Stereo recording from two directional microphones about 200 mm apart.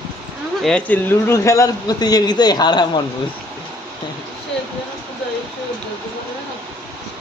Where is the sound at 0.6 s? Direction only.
5° left (ahead or behind); by 3.0 s 20° left (ahead or behind).